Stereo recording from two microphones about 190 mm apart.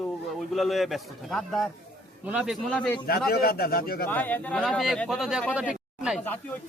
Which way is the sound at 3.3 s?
55° left (ahead or behind).